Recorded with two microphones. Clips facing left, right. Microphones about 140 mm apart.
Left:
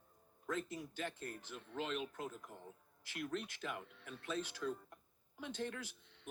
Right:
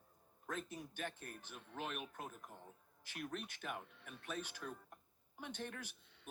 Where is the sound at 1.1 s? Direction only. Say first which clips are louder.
Left 5 dB; 90° left.